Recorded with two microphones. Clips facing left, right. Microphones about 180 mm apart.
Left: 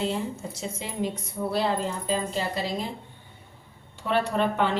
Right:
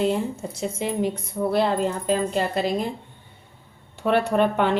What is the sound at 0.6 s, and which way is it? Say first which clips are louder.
A woman's voice: right 6 dB; 60° right (ahead or behind).